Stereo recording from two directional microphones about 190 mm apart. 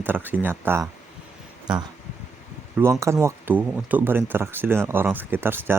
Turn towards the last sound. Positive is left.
turn(degrees=-10)  # may be behind; listen again after turning